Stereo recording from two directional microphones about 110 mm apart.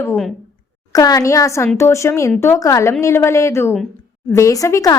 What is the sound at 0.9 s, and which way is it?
A woman's voice, 35° left (ahead or behind).